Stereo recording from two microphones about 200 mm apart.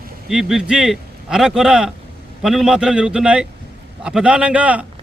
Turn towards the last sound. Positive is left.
turn(degrees=-5)  # may be behind; listen again after turning